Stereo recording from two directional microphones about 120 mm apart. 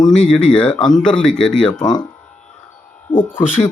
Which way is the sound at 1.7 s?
35° left (ahead or behind).